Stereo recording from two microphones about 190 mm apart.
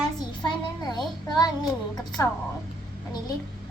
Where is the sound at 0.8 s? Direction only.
20° left (ahead or behind).